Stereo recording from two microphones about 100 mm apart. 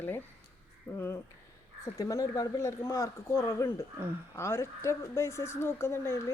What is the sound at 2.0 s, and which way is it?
A woman's voice, 35° left (ahead or behind).